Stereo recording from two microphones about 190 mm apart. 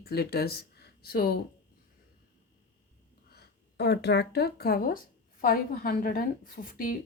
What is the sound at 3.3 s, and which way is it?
A woman's voice, 60° left (ahead or behind).